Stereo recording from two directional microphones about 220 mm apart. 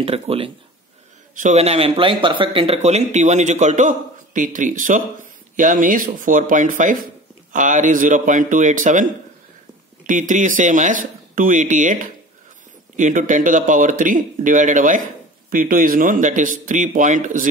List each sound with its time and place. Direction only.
0.0 s speech: 25° right (ahead or behind)